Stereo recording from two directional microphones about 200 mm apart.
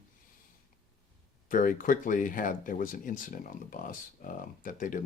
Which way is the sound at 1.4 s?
40° left (ahead or behind).